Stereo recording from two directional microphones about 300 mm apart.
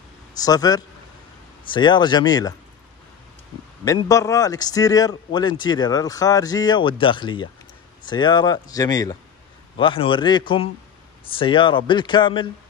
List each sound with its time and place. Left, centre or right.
0.4 s a man's voice: centre
3.8 s a man's voice: centre